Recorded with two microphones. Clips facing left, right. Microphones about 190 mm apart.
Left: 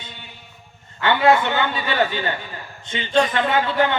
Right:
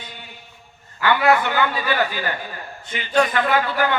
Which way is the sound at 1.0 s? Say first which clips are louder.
Left 1 dB; 25° left (ahead or behind).